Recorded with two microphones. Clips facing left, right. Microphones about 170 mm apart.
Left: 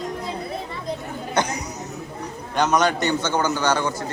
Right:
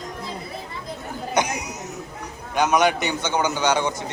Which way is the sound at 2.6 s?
10° right (ahead or behind).